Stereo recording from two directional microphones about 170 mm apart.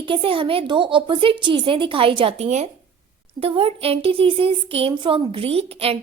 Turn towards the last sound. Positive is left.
turn(degrees=-35)  # may be behind; listen again after turning